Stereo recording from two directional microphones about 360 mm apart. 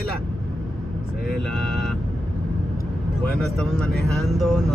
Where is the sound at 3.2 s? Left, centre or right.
Centre.